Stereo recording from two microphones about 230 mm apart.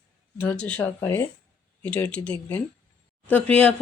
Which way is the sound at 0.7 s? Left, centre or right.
Centre.